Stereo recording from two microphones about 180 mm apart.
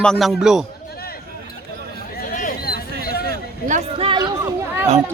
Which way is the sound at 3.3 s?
45° right (ahead or behind).